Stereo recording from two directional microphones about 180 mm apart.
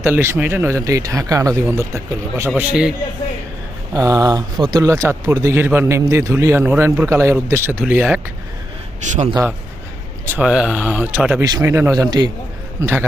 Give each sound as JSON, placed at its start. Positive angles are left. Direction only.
{"t": 0.0, "sound": "a man's voice", "side_deg": -15}
{"t": 3.9, "sound": "speech", "side_deg": -20}
{"t": 10.2, "sound": "speech", "side_deg": -5}
{"t": 11.4, "sound": "speech", "side_deg": -15}